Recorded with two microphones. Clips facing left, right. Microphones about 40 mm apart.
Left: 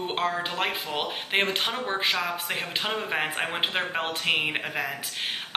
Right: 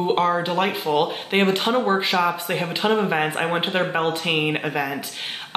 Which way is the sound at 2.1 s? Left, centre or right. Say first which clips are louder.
Right 6 dB; centre.